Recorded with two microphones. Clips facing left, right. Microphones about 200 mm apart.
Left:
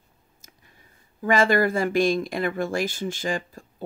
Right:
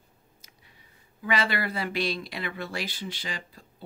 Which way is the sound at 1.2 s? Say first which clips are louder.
Left 8 dB; 45° left (ahead or behind).